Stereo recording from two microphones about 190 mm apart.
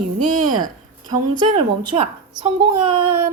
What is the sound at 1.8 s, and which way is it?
Speech, 25° right (ahead or behind).